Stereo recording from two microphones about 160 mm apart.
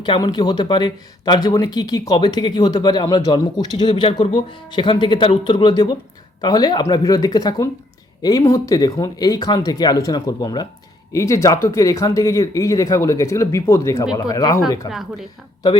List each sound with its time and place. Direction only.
0.0 s speech: 30° left (ahead or behind)
14.8 s a woman's voice: centre (ahead or behind)